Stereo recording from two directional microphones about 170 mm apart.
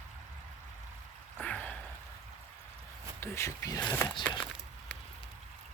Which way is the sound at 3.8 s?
15° left (ahead or behind).